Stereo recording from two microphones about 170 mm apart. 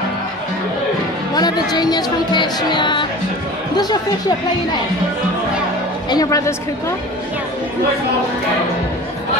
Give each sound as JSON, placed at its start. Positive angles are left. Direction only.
{"t": 1.3, "sound": "speech", "side_deg": 25}
{"t": 6.0, "sound": "speech", "side_deg": 20}